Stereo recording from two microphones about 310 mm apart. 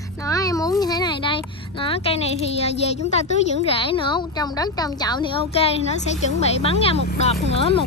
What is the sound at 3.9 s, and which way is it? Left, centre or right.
Speech, centre.